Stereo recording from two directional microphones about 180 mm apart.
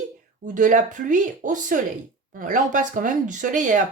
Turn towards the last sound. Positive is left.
turn(degrees=-45)  # may be behind; listen again after turning